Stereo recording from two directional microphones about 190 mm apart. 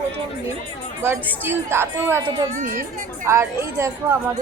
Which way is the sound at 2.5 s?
45° right (ahead or behind).